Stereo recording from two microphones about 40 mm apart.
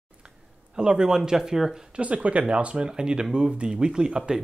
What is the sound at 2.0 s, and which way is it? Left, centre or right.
Speech, right.